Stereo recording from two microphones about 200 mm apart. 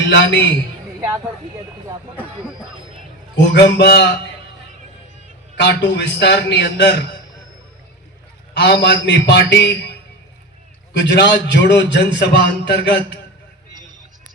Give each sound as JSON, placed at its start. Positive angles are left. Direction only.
{"t": 0.1, "sound": "a man's voice", "side_deg": 60}
{"t": 3.3, "sound": "a man's voice", "side_deg": 60}
{"t": 5.5, "sound": "a man's voice", "side_deg": 60}
{"t": 8.5, "sound": "a man's voice", "side_deg": 55}
{"t": 11.0, "sound": "a man's voice", "side_deg": 60}